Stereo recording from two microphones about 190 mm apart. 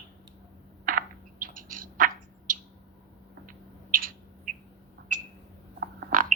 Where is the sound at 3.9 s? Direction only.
45° right (ahead or behind).